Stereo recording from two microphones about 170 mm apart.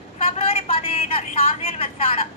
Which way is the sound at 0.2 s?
35° left (ahead or behind).